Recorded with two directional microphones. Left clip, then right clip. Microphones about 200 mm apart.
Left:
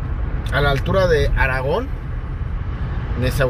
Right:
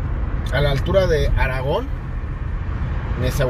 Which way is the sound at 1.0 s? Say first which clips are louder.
Left 3 dB; 25° left (ahead or behind).